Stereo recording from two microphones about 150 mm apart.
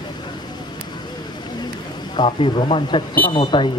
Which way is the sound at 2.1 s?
30° left (ahead or behind).